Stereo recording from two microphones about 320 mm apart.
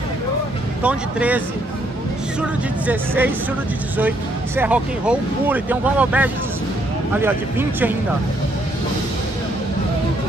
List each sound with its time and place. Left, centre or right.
0.8 s speech: centre
2.9 s speech: centre
4.6 s speech: centre